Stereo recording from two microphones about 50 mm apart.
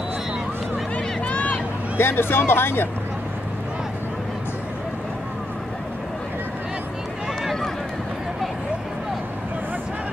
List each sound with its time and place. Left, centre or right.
0.9 s vehicle: left
2.0 s speech: left